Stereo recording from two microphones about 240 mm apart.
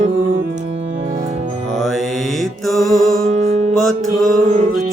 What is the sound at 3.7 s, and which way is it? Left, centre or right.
Music, centre.